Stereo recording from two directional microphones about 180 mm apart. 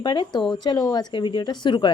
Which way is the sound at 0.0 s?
25° left (ahead or behind).